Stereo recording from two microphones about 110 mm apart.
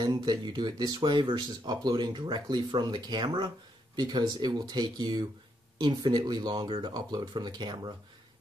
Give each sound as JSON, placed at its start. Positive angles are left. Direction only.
{"t": 0.0, "sound": "speech", "side_deg": -40}